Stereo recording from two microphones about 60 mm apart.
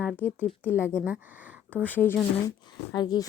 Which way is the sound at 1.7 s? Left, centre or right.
Left.